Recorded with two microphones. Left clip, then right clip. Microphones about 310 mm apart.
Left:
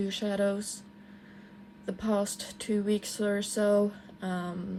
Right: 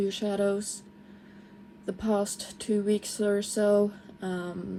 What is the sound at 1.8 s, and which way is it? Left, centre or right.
Speech, left.